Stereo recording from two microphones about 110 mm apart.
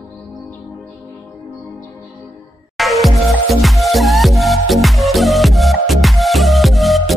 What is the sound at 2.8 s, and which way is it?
Music, centre (ahead or behind).